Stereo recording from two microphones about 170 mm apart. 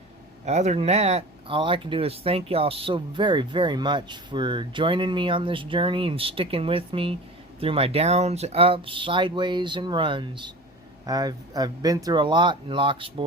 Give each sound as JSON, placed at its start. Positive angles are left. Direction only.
{"t": 0.4, "sound": "speech", "side_deg": -40}